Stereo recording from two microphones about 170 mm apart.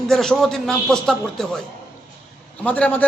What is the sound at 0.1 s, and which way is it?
A man's voice, centre (ahead or behind).